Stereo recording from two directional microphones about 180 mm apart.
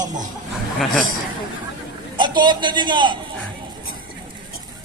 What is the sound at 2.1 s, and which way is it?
A man's voice, 25° right (ahead or behind).